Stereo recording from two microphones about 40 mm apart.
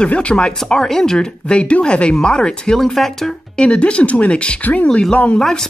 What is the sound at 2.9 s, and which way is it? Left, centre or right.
Speech, centre.